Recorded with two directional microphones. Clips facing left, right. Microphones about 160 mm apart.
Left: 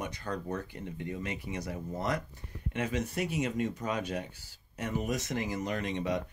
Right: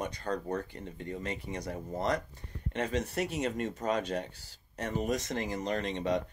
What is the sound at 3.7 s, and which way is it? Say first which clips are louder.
Speech: right 3 dB; 45° right (ahead or behind).